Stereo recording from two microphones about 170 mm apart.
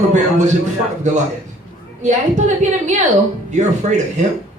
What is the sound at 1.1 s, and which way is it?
A woman's voice, 45° right (ahead or behind).